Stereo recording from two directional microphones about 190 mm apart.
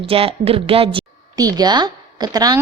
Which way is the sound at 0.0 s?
30° right (ahead or behind).